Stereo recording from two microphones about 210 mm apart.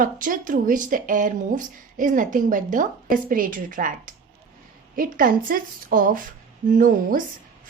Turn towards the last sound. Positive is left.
turn(degrees=-40)  # may be behind; listen again after turning